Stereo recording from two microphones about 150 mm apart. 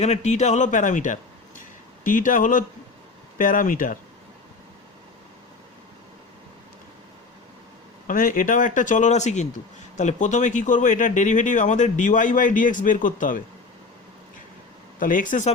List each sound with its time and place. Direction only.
0.0 s speech: 50° left (ahead or behind); by 3.9 s 65° left (ahead or behind)
8.0 s speech: 65° left (ahead or behind)
14.9 s speech: 65° left (ahead or behind)